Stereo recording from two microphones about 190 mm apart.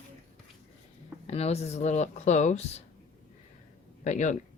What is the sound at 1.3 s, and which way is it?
Speech, 35° left (ahead or behind).